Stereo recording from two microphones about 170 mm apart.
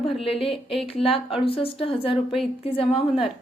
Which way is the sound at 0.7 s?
35° left (ahead or behind).